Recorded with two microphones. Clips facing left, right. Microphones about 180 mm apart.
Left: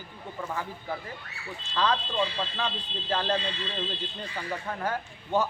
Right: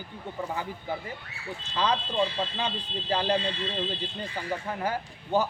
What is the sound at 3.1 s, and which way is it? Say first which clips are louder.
Speech: right 2 dB; 15° right (ahead or behind).